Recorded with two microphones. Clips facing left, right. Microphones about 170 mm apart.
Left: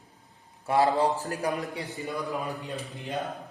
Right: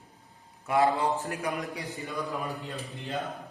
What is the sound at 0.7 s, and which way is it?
A man's voice, 30° left (ahead or behind).